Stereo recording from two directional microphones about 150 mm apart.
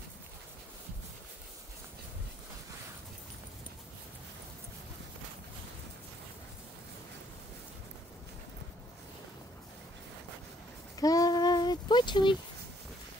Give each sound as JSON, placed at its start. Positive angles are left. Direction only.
{"t": 11.0, "sound": "child singing", "side_deg": 25}